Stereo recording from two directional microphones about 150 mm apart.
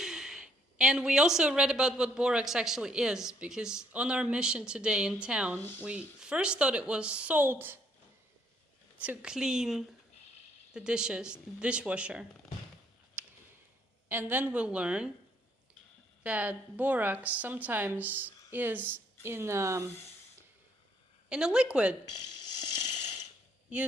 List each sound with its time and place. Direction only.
0.0 s a woman's voice: 5° right (ahead or behind)
9.0 s a woman's voice: 10° right (ahead or behind)
13.2 s a sound: 10° right (ahead or behind)
14.1 s a woman's voice: 15° right (ahead or behind)
16.2 s a woman's voice: 10° right (ahead or behind)
21.2 s speech: 5° right (ahead or behind)
22.4 s a sound: 25° left (ahead or behind)